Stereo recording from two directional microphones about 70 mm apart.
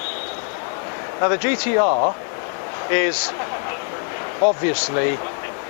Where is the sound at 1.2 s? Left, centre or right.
Centre.